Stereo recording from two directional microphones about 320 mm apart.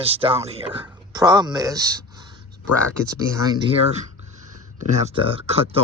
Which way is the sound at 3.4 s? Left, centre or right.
Centre.